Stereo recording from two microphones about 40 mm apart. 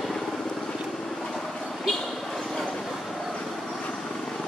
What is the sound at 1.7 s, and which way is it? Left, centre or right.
Vehicle, centre.